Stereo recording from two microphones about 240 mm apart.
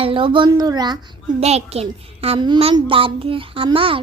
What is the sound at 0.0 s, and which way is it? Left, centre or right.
A child's voice, right.